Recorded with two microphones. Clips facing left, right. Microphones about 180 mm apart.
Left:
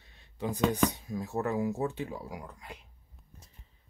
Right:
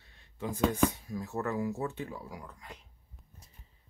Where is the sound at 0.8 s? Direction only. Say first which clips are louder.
Right 1 dB; 15° left (ahead or behind).